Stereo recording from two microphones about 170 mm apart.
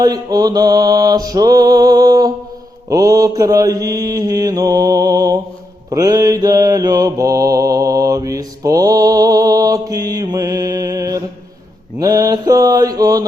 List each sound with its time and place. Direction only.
0.0 s mantra: 20° right (ahead or behind)